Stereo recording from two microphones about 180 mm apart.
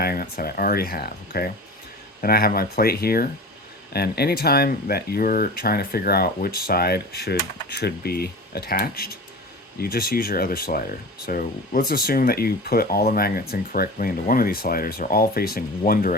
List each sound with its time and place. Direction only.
0.0 s speech: 55° left (ahead or behind)